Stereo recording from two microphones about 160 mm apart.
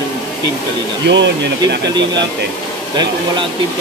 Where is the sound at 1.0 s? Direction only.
90° right.